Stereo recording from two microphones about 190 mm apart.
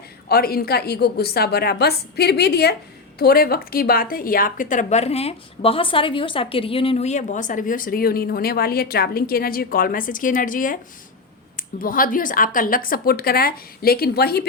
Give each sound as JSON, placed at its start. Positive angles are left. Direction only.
{"t": 0.3, "sound": "a woman's voice", "side_deg": 55}